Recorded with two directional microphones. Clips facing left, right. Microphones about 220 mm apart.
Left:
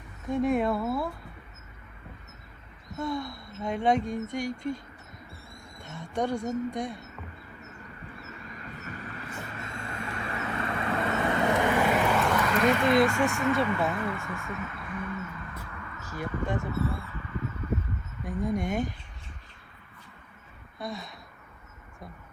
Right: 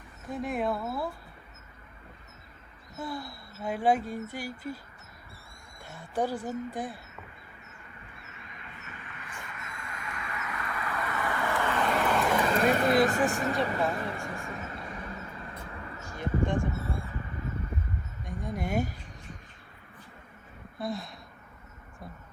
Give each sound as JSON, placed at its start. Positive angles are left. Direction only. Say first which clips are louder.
{"t": 0.3, "sound": "speech", "louder": "left 5 dB", "side_deg": 0}
{"t": 3.0, "sound": "speech", "louder": "left 5 dB", "side_deg": -5}
{"t": 5.8, "sound": "speech", "louder": "left 1 dB", "side_deg": -5}
{"t": 8.2, "sound": "vehicle", "louder": "left 7 dB", "side_deg": 40}
{"t": 12.3, "sound": "a sound", "louder": "even", "side_deg": -30}
{"t": 12.6, "sound": "speech", "louder": "left 2 dB", "side_deg": -45}
{"t": 16.6, "sound": "a sound", "louder": "left 1 dB", "side_deg": -30}
{"t": 18.3, "sound": "speech", "louder": "left 5 dB", "side_deg": 0}
{"t": 20.7, "sound": "speech", "louder": "right 3 dB", "side_deg": 0}